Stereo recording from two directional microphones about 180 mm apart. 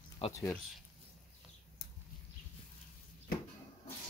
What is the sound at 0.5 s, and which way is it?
Speech, centre (ahead or behind).